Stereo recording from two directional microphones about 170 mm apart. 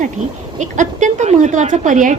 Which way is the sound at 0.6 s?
45° right (ahead or behind).